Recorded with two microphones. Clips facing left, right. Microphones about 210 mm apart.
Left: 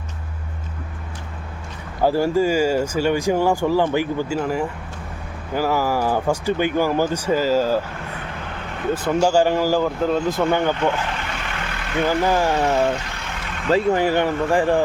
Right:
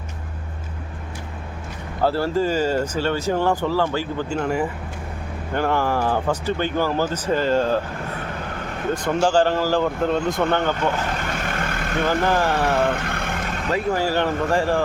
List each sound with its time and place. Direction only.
2.0 s speech: 15° left (ahead or behind)
9.2 s speech: 10° left (ahead or behind)
11.2 s vehicle: 45° right (ahead or behind)
12.0 s speech: 10° left (ahead or behind)
12.5 s vehicle: 55° right (ahead or behind)
13.7 s speech: 25° left (ahead or behind)